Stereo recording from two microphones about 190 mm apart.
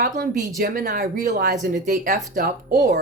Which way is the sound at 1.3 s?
55° right (ahead or behind).